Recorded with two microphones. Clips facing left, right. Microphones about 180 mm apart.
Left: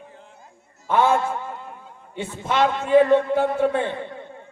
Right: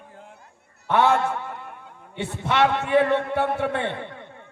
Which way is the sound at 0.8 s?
65° right (ahead or behind).